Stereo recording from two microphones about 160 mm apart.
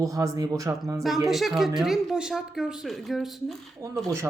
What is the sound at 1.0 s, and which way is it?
A woman's voice, centre (ahead or behind).